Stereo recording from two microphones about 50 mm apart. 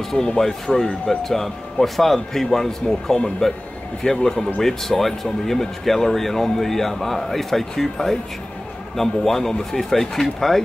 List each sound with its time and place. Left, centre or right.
0.1 s speech: centre